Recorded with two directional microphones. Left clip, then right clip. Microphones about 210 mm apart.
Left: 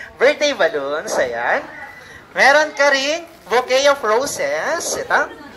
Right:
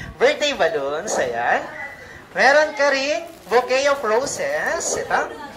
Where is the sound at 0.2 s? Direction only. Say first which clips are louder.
Left 3 dB; 15° left (ahead or behind).